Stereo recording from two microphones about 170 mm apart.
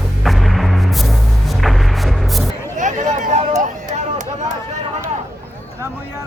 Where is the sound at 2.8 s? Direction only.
45° right (ahead or behind).